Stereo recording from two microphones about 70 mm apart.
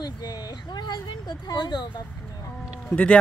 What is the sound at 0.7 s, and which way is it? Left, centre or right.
Speech, left.